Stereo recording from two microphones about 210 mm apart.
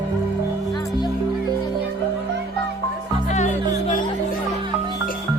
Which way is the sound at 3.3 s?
35° left (ahead or behind).